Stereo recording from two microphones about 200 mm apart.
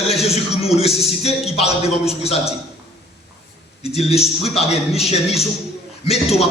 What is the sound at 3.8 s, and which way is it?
A man's voice, 30° left (ahead or behind).